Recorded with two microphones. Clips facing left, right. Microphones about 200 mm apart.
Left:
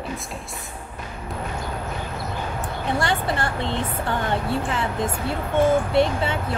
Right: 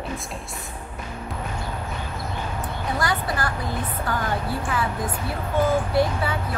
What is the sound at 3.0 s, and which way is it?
Speech, 25° left (ahead or behind).